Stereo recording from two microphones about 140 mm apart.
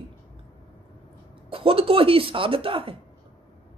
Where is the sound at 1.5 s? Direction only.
40° right (ahead or behind).